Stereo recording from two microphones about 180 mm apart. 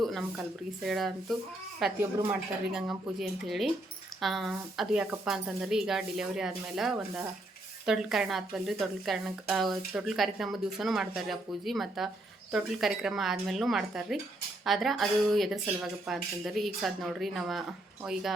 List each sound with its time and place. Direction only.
0.0 s speech: centre (ahead or behind)
2.0 s speech: 15° right (ahead or behind)
2.7 s speech: 5° right (ahead or behind)